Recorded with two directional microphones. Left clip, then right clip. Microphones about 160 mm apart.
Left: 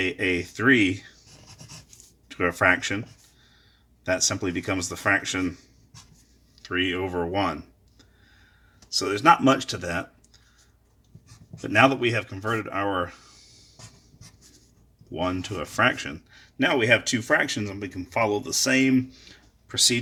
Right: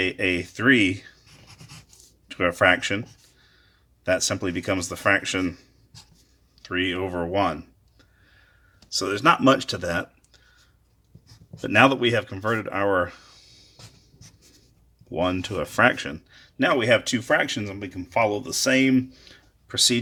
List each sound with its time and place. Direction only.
0.0 s speech: 25° right (ahead or behind)
2.2 s speech: 25° right (ahead or behind)
4.0 s speech: 25° right (ahead or behind)
11.6 s speech: 35° right (ahead or behind)
15.1 s speech: 35° right (ahead or behind)